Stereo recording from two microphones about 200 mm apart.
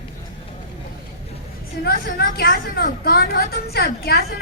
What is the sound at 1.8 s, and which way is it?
A woman's voice, 50° left (ahead or behind).